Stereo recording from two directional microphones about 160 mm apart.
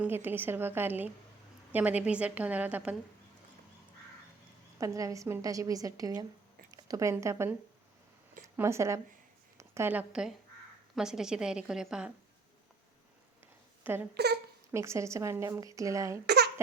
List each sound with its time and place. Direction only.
0.0 s a woman's voice: 15° right (ahead or behind)
4.8 s a woman's voice: 20° right (ahead or behind)
8.5 s a woman's voice: 15° right (ahead or behind)
13.8 s a woman's voice: 10° right (ahead or behind)
14.1 s speech: 90° right
14.7 s a woman's voice: 15° right (ahead or behind)
16.2 s a sound: 90° right